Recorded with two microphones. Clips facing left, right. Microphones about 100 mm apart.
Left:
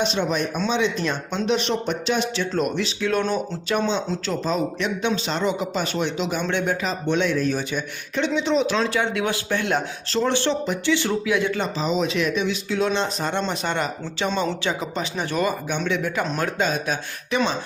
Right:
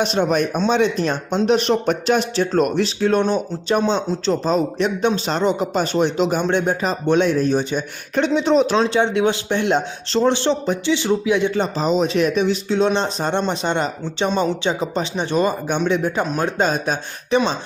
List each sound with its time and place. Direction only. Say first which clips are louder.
0.0 s speech: right 5 dB; 45° right (ahead or behind)
8.1 s a man's voice: right 5 dB; 45° right (ahead or behind); by 11.7 s 25° right (ahead or behind)
11.8 s a man's voice: right 5 dB; 40° right (ahead or behind)